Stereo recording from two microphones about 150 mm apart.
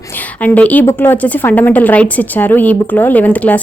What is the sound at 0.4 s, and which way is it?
Speech, 10° left (ahead or behind).